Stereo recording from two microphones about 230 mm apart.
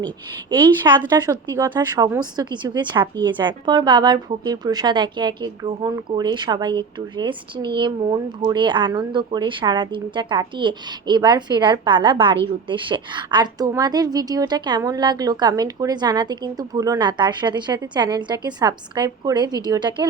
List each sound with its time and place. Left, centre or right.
0.9 s a woman's voice: centre